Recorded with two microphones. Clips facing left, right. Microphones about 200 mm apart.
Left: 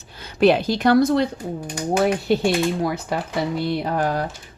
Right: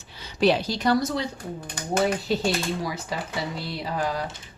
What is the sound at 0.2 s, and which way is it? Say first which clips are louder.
A woman's voice: left 5 dB; 55° left (ahead or behind).